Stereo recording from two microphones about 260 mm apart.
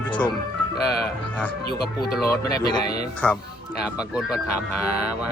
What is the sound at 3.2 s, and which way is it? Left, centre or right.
Speech, centre.